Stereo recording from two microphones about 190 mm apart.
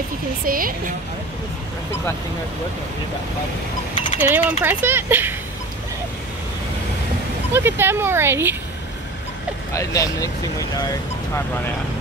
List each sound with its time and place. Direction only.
0.5 s a woman's voice: 50° right (ahead or behind)
3.9 s a sound: 25° left (ahead or behind)
4.2 s speech: 10° right (ahead or behind)
7.5 s speech: 10° right (ahead or behind)
9.8 s speech: 20° left (ahead or behind)